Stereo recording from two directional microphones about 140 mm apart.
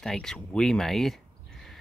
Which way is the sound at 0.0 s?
5° left (ahead or behind).